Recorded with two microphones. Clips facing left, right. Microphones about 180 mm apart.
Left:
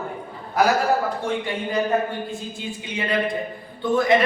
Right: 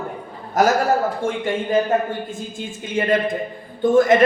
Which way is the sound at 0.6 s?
45° right (ahead or behind).